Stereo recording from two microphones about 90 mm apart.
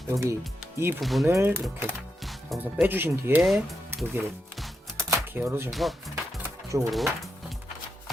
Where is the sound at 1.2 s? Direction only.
30° right (ahead or behind).